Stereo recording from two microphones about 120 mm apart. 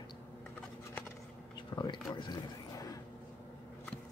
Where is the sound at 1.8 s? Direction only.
35° left (ahead or behind).